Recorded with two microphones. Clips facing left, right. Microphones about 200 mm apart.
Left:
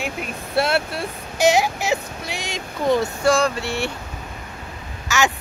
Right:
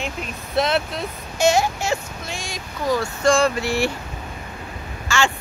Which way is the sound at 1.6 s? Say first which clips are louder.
Left 1 dB; 15° left (ahead or behind).